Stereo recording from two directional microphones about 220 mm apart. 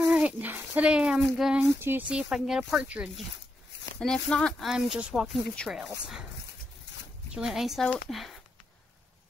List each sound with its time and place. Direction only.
0.0 s speech: 5° right (ahead or behind)
7.3 s speech: centre (ahead or behind)